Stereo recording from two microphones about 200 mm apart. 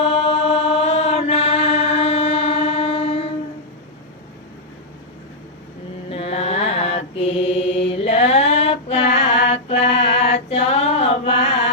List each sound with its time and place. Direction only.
0.0 s chant: 30° left (ahead or behind)
6.1 s mantra: 30° left (ahead or behind)